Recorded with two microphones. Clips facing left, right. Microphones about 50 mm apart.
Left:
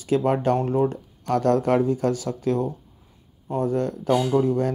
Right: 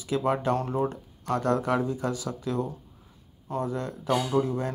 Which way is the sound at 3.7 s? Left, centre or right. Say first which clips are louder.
Left 7 dB; left.